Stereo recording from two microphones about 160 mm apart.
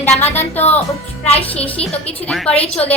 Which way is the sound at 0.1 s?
45° left (ahead or behind).